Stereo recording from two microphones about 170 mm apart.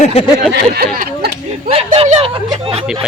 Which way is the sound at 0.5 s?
65° right (ahead or behind).